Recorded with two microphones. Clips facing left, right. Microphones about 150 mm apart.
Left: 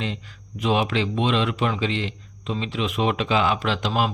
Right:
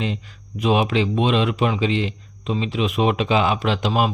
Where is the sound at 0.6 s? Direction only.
15° right (ahead or behind).